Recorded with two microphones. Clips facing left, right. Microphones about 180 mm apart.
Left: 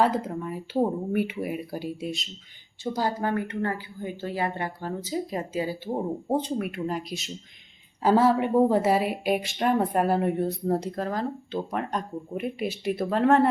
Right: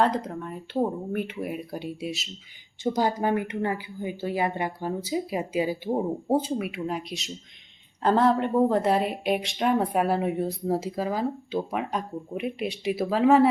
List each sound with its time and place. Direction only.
0.0 s speech: 5° left (ahead or behind)
2.8 s speech: 20° right (ahead or behind)